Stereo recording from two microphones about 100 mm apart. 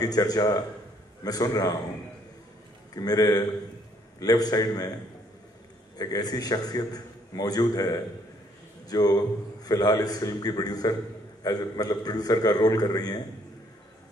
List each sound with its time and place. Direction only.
0.0 s a man's voice: 40° left (ahead or behind)
2.9 s a man's voice: 40° left (ahead or behind)
5.9 s a man's voice: 40° left (ahead or behind)